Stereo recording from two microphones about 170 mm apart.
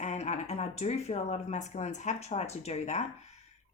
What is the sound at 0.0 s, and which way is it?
A woman's voice, 40° left (ahead or behind).